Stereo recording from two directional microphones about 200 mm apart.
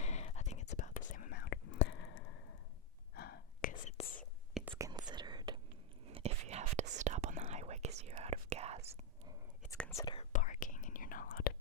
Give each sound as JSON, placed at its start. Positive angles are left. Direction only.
{"t": 0.0, "sound": "whispering", "side_deg": 35}
{"t": 3.2, "sound": "whispering", "side_deg": 50}
{"t": 4.8, "sound": "whispering", "side_deg": -20}
{"t": 6.1, "sound": "whispering", "side_deg": -30}
{"t": 9.7, "sound": "whispering", "side_deg": 5}
{"t": 10.0, "sound": "whispering", "side_deg": 25}
{"t": 10.3, "sound": "whispering", "side_deg": 40}